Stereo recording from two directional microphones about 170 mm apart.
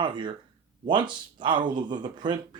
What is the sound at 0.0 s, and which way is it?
Speech, 30° right (ahead or behind).